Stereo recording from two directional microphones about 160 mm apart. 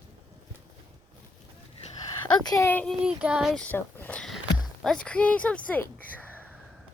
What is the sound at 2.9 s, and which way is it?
Child singing, 5° right (ahead or behind).